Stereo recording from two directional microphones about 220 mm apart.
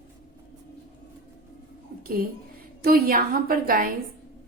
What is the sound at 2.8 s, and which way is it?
A woman's voice, 40° right (ahead or behind).